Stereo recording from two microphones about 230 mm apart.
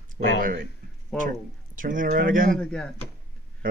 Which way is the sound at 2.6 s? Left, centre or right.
Centre.